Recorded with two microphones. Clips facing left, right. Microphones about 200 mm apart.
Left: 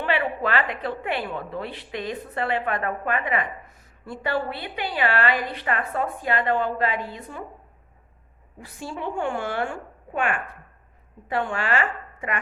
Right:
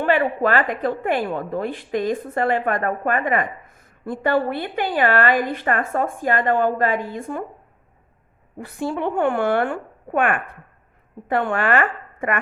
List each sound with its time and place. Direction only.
0.0 s a woman's voice: 45° right (ahead or behind)
8.5 s a woman's voice: 60° right (ahead or behind)